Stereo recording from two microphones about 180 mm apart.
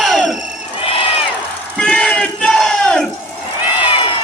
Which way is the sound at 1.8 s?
5° left (ahead or behind).